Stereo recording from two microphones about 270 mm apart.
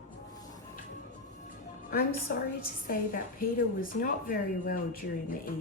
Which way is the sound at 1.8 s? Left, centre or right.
Left.